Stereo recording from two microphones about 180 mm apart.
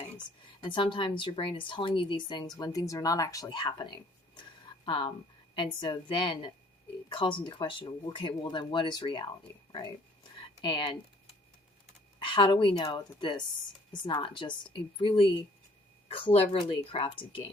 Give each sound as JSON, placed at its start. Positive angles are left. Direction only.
{"t": 0.6, "sound": "speech", "side_deg": 25}
{"t": 10.4, "sound": "a sound", "side_deg": 25}
{"t": 12.2, "sound": "speech", "side_deg": 25}